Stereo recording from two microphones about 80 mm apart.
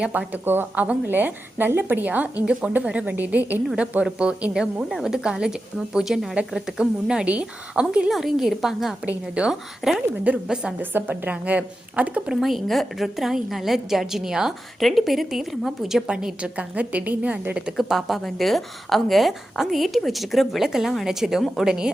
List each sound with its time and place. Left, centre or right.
0.0 s a woman's voice: centre
0.4 s a woman's voice: right; by 10.8 s centre
10.8 s a woman's voice: right
12.4 s a woman's voice: centre
17.7 s a woman's voice: centre